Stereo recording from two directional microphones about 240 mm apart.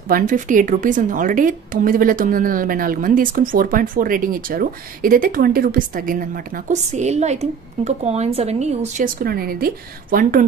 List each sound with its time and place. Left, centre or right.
0.1 s a woman's voice: right